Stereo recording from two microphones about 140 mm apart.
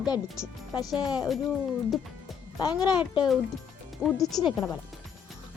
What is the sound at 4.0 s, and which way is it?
Speech, centre (ahead or behind).